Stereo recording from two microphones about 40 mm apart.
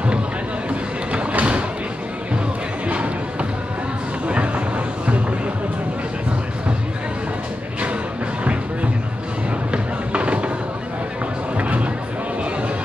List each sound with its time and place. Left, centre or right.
0.7 s music: right
2.9 s music: right
4.3 s a sound: right
9.7 s music: right
11.5 s music: right